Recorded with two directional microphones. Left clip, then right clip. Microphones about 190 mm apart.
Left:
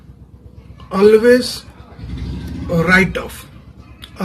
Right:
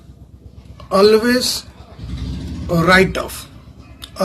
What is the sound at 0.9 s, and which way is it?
Speech, 35° right (ahead or behind).